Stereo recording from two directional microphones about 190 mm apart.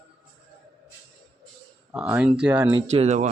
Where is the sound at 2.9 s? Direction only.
35° right (ahead or behind).